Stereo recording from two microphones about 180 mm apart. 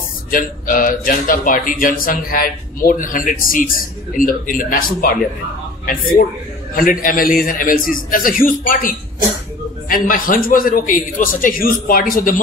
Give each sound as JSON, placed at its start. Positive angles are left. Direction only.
{"t": 0.3, "sound": "speech", "side_deg": 50}
{"t": 5.9, "sound": "speech", "side_deg": 50}